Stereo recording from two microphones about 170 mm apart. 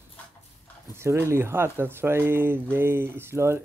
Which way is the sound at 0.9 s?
15° right (ahead or behind).